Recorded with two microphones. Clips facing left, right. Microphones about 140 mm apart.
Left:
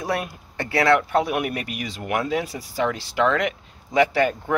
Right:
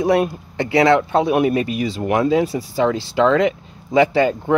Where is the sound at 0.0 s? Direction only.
20° right (ahead or behind).